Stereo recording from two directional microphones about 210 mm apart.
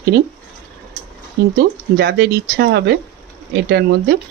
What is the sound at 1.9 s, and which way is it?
Speech, 50° right (ahead or behind).